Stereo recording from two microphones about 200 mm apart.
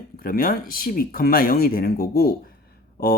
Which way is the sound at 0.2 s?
45° left (ahead or behind).